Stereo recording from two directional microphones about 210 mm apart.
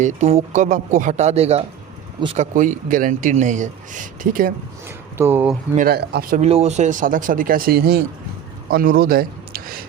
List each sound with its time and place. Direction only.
0.0 s speech: 30° right (ahead or behind)
5.1 s speech: 10° right (ahead or behind)
5.7 s a man's voice: 45° right (ahead or behind)